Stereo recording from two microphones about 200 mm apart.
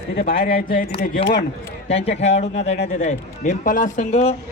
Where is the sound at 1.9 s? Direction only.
30° left (ahead or behind).